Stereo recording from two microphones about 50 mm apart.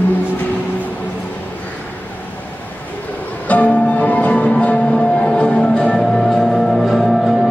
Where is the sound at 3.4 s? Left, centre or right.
Left; by 7.3 s centre.